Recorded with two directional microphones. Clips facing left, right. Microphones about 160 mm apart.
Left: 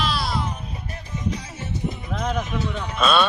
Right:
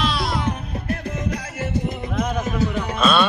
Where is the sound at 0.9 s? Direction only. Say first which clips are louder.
Right 5 dB; 55° right (ahead or behind).